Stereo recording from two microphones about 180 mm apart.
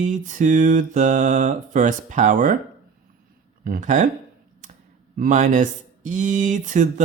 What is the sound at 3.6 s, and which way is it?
Speech, 50° right (ahead or behind).